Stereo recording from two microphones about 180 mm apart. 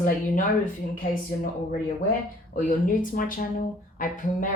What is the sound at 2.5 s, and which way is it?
Speech, 50° left (ahead or behind).